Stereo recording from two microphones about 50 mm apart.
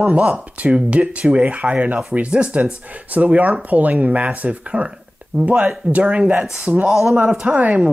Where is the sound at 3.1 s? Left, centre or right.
Right.